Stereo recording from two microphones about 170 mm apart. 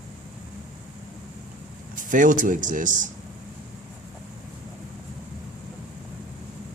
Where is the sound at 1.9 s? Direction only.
50° right (ahead or behind).